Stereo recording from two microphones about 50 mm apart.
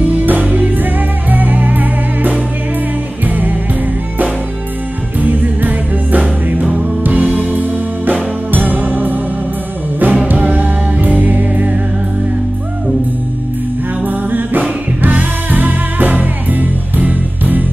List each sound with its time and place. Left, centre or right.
0.0 s music: right
5.2 s music: right
6.2 s music: right
14.0 s music: right